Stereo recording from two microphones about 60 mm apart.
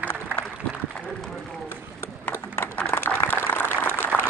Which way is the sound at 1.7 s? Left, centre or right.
Left.